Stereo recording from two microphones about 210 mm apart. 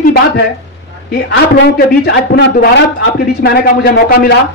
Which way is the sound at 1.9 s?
50° left (ahead or behind).